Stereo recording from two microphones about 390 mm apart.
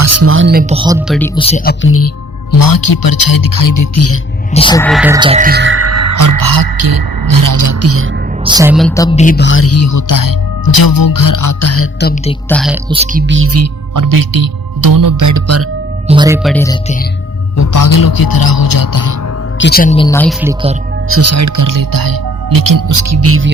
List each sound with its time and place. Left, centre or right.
0.0 s speech: right; by 1.3 s centre
1.4 s speech: centre
2.5 s speech: left
4.5 s speech: centre; by 8.0 s right
8.4 s speech: centre; by 12.3 s left
12.3 s speech: centre
12.9 s speech: centre
13.2 s speech: right
13.9 s speech: right
16.0 s speech: centre
17.6 s speech: left
19.5 s speech: left; by 20.3 s centre
20.4 s speech: centre
21.1 s speech: right